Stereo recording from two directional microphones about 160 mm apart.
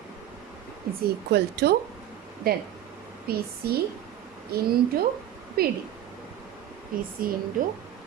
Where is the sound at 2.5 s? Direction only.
70° right (ahead or behind).